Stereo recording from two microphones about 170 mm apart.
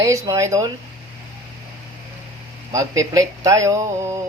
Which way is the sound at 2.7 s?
20° right (ahead or behind).